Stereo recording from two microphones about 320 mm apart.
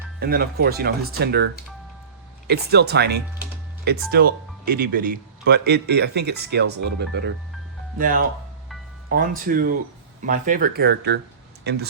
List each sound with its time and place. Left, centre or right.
0.2 s speech: right